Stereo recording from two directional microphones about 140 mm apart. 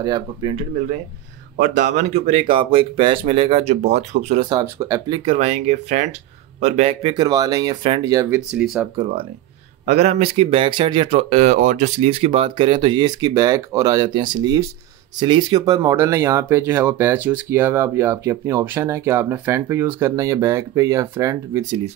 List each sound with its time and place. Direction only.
0.0 s speech: 30° right (ahead or behind)
1.6 s speech: 60° right (ahead or behind)
4.4 s speech: 30° right (ahead or behind)
7.2 s speech: 25° right (ahead or behind)
8.0 s speech: 25° right (ahead or behind)
8.3 s speech: 5° right (ahead or behind)
9.8 s speech: 50° right (ahead or behind)
12.1 s speech: 40° right (ahead or behind); by 21.6 s 20° right (ahead or behind)